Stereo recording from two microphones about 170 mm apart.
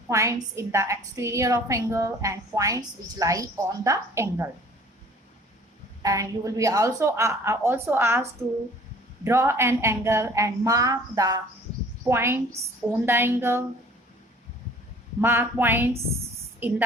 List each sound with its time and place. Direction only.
0.1 s a woman's voice: 15° right (ahead or behind)
6.0 s a woman's voice: 20° right (ahead or behind)
15.2 s a woman's voice: 15° right (ahead or behind)